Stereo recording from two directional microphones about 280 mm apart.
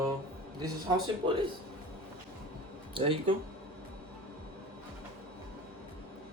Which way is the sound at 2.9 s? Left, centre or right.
Centre.